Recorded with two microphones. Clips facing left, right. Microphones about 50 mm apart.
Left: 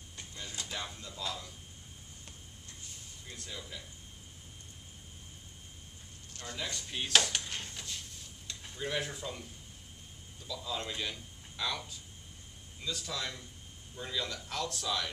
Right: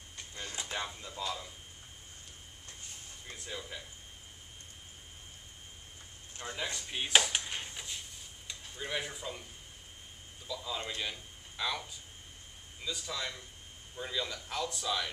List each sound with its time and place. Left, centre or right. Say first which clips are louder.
0.6 s speech: right 3 dB; right
3.3 s speech: right 3 dB; centre
6.3 s a man's voice: right 2 dB; right